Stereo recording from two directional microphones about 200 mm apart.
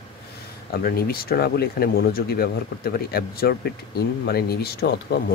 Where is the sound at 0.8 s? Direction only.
50° left (ahead or behind).